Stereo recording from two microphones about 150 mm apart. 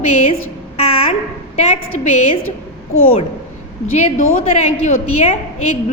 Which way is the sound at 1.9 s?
50° left (ahead or behind).